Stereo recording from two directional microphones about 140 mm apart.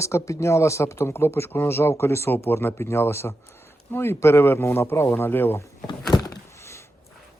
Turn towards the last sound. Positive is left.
turn(degrees=30)  # may be behind; listen again after turning